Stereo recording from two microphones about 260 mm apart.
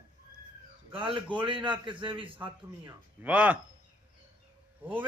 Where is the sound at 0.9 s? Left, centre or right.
Centre.